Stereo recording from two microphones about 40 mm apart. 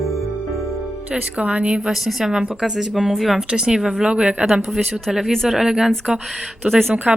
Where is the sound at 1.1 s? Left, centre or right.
Right.